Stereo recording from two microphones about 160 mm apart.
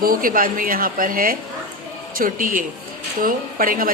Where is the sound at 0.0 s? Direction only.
60° right (ahead or behind).